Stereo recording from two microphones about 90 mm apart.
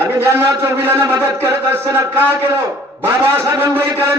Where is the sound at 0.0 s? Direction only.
25° right (ahead or behind).